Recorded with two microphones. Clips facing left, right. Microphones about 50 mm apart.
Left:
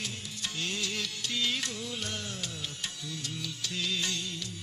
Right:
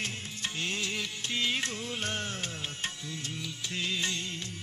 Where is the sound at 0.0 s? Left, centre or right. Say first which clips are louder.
Right 2 dB; right.